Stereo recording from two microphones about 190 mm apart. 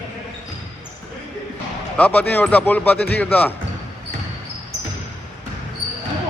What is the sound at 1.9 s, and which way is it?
Speech, 10° left (ahead or behind).